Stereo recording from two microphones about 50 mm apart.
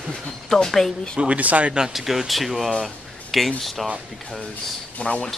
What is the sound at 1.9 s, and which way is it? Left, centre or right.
A man's voice, centre.